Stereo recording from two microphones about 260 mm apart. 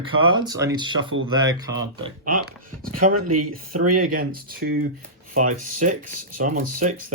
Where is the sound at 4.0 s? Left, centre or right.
Right.